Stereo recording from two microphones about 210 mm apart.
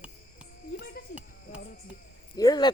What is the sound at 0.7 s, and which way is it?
Speech, 50° left (ahead or behind).